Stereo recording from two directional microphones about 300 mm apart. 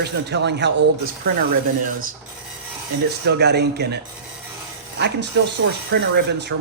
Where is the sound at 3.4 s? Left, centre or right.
Right.